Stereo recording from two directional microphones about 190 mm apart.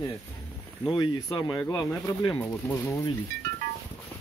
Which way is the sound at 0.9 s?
20° left (ahead or behind).